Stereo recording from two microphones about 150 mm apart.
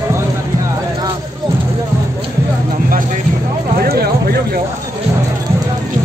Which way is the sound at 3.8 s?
90° right.